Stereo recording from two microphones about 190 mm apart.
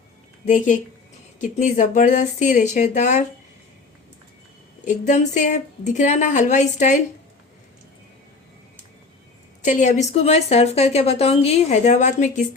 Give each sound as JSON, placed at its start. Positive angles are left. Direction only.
{"t": 0.4, "sound": "speech", "side_deg": 40}
{"t": 4.9, "sound": "speech", "side_deg": 40}
{"t": 9.6, "sound": "speech", "side_deg": 40}